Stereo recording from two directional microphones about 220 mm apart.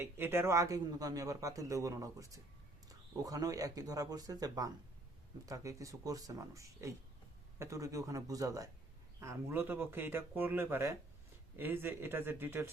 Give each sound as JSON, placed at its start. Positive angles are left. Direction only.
{"t": 0.0, "sound": "a man's voice", "side_deg": -10}